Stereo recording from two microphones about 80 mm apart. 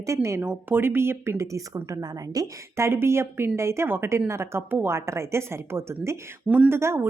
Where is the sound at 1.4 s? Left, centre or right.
Right.